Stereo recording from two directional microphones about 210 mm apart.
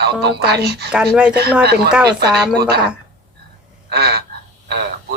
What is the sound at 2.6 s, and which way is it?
Speech, 50° right (ahead or behind).